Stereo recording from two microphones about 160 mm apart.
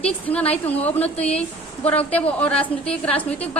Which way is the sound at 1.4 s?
40° left (ahead or behind).